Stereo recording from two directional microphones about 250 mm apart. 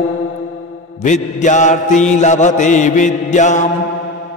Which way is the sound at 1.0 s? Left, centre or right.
Left.